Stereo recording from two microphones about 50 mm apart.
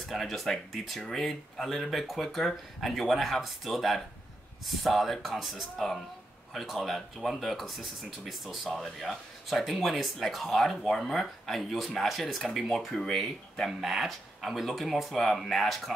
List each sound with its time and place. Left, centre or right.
0.0 s speech: centre